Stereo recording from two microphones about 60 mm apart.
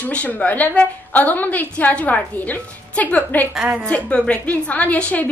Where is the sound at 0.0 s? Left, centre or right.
Left.